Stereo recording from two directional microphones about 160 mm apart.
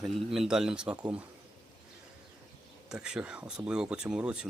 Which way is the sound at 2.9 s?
5° right (ahead or behind).